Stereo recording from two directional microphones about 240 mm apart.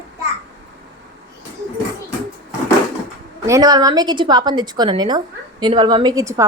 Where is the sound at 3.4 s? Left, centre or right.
Centre.